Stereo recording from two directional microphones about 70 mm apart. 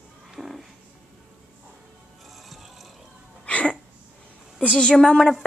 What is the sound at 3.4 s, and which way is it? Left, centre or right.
Music, centre.